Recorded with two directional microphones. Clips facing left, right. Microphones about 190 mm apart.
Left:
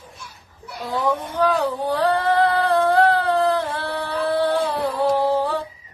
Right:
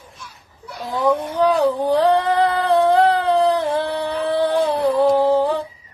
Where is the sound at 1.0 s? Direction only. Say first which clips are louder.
Right 4 dB; 15° right (ahead or behind).